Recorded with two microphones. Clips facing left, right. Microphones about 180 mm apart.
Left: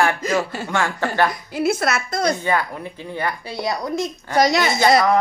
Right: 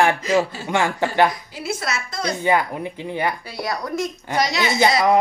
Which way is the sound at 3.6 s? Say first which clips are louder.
Left 4 dB; 20° left (ahead or behind).